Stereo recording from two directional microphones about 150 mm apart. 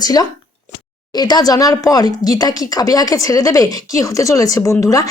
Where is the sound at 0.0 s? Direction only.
25° left (ahead or behind).